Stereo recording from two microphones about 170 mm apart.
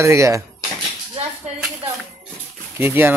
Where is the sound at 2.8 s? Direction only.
10° right (ahead or behind).